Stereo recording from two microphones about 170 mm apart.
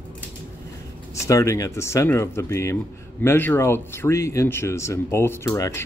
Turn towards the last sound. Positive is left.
turn(degrees=20)  # may be behind; listen again after turning